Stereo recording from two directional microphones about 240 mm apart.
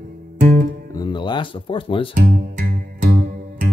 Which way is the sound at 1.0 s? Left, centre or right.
Centre.